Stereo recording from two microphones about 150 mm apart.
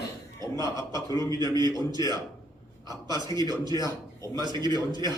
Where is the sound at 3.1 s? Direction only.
25° left (ahead or behind).